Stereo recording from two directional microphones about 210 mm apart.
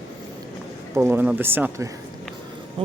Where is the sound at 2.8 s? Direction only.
25° right (ahead or behind).